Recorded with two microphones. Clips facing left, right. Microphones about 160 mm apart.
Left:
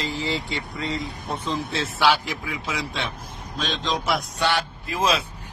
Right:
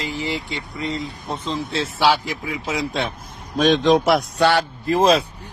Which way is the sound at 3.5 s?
55° right (ahead or behind).